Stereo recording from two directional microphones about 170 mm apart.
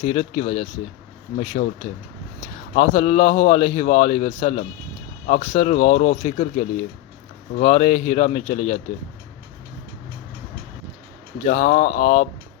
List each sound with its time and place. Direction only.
0.0 s a man's voice: 35° left (ahead or behind)
1.6 s speech: 50° left (ahead or behind)
2.7 s a man's voice: 35° left (ahead or behind)
11.4 s a man's voice: 40° left (ahead or behind)